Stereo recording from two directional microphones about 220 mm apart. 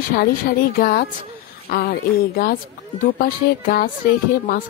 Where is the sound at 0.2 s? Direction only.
45° left (ahead or behind).